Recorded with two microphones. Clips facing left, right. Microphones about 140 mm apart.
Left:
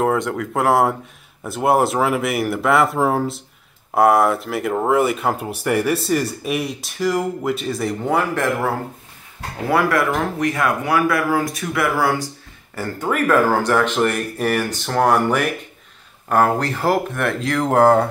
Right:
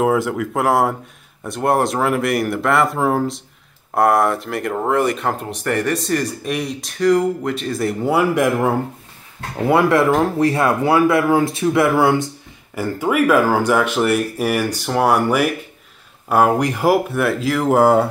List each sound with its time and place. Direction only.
0.0 s speech: 5° right (ahead or behind)
9.6 s speech: 20° right (ahead or behind)
12.7 s speech: 10° right (ahead or behind)